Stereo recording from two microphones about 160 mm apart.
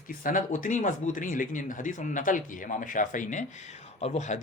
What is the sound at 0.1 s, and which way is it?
Speech, 60° left (ahead or behind).